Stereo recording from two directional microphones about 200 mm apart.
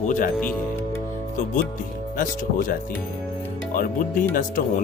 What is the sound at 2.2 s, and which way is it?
Speech, 45° left (ahead or behind).